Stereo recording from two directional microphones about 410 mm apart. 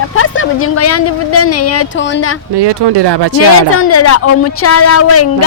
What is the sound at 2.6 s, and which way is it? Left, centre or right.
Speech, right.